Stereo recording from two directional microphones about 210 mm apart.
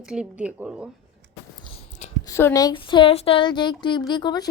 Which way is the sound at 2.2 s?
15° left (ahead or behind).